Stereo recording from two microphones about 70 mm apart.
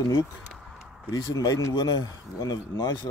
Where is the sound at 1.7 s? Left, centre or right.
Left.